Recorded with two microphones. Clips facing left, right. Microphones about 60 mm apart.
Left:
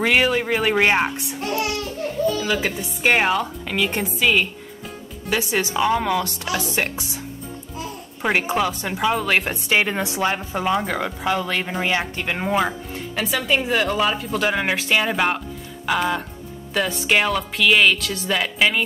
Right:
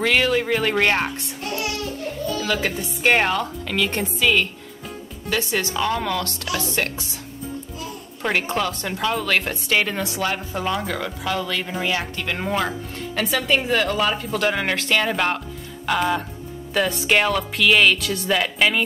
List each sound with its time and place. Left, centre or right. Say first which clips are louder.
0.0 s speech: left 1 dB; centre
2.4 s speech: left 1 dB; centre
8.2 s speech: left 2 dB; centre
12.4 s speech: left 4 dB; centre